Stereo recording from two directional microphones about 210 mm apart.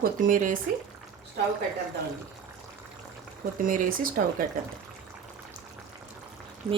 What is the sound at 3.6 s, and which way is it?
Speech, 40° right (ahead or behind).